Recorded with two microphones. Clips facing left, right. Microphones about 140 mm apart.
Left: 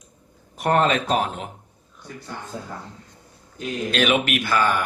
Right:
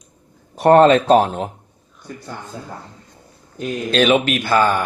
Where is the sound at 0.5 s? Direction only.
35° right (ahead or behind).